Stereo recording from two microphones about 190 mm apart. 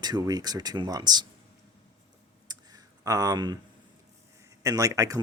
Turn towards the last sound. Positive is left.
turn(degrees=-20)  # may be behind; listen again after turning